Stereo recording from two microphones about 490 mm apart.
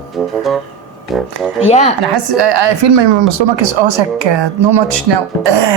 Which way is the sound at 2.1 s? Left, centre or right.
Right.